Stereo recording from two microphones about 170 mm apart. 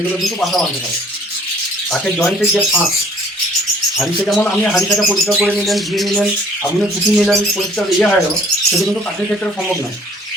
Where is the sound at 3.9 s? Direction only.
Centre (ahead or behind).